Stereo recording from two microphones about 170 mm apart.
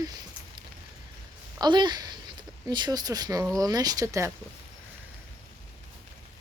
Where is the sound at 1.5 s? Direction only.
25° right (ahead or behind).